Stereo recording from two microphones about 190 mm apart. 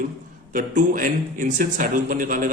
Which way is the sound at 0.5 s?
45° right (ahead or behind).